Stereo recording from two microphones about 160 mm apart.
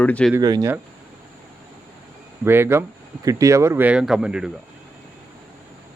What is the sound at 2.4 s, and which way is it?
Speech, 15° right (ahead or behind).